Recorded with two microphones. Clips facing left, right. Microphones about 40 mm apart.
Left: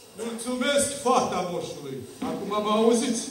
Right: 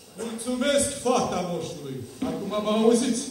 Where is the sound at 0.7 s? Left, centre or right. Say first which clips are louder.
Left 2 dB; centre.